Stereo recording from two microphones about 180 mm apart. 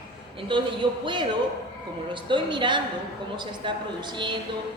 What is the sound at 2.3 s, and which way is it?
Speech, 25° right (ahead or behind).